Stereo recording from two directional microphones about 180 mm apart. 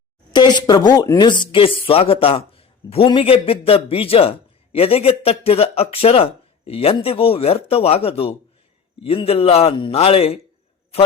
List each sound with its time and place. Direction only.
0.3 s speech: 25° left (ahead or behind)